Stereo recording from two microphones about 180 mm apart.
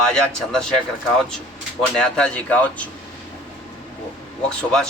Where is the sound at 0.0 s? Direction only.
5° left (ahead or behind).